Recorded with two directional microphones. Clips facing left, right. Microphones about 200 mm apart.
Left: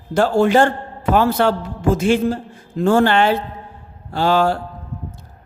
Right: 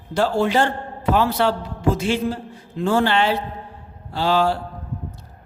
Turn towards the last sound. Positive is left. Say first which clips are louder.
# left 3 dB
turn(degrees=50)  # may be behind; listen again after turning